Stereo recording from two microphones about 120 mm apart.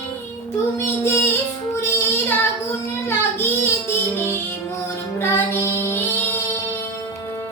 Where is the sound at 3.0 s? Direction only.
20° left (ahead or behind).